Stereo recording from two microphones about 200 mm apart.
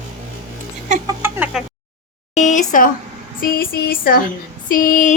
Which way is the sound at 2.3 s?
40° left (ahead or behind).